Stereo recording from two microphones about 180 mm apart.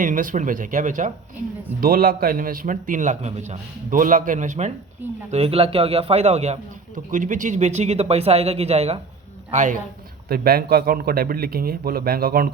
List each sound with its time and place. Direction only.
0.0 s a man's voice: 50° right (ahead or behind)
10.2 s a man's voice: 60° right (ahead or behind)